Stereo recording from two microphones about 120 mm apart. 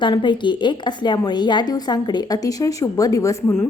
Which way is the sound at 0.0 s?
40° left (ahead or behind).